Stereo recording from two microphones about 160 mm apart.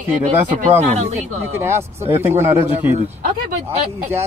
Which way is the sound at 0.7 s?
40° right (ahead or behind).